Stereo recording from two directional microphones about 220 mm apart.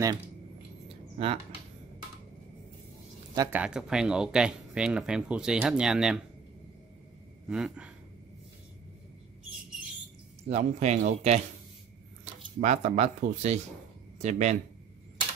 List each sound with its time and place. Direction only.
0.8 s a sound: 25° right (ahead or behind)
3.3 s speech: 10° right (ahead or behind)
7.4 s speech: 5° right (ahead or behind)
10.5 s speech: 30° right (ahead or behind)
12.5 s speech: 35° right (ahead or behind)